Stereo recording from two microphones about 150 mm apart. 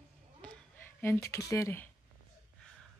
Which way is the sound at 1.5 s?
15° left (ahead or behind).